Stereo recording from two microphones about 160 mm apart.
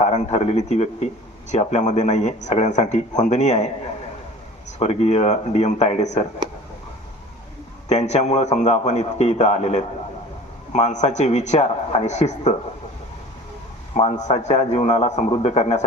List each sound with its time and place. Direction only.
0.0 s a man's voice: 45° left (ahead or behind)
4.8 s a man's voice: 40° left (ahead or behind)
7.9 s a man's voice: 45° left (ahead or behind)
13.9 s a man's voice: 45° left (ahead or behind)